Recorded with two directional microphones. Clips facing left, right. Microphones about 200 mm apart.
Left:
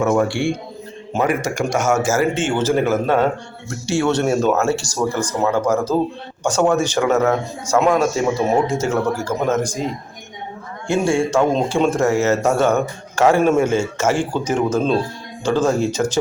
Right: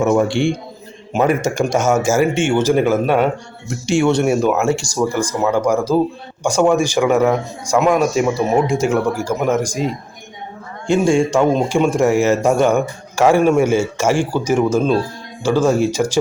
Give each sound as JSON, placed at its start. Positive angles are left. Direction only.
{"t": 0.0, "sound": "a man's voice", "side_deg": -20}
{"t": 10.8, "sound": "speech", "side_deg": -15}